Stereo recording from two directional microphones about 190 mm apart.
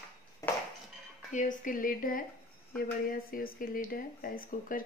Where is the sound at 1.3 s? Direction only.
40° left (ahead or behind).